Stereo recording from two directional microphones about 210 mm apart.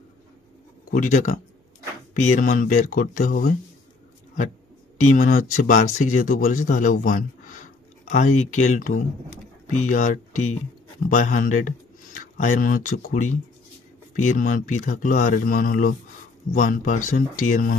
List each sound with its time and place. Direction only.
0.9 s speech: 40° left (ahead or behind)
4.9 s speech: 35° left (ahead or behind)